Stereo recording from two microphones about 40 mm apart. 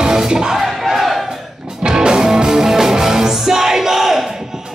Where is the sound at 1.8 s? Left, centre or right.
Right.